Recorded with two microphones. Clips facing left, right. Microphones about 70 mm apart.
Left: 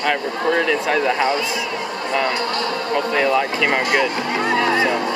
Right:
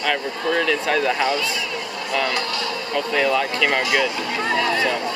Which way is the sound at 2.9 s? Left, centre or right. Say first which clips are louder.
Left 2 dB; centre.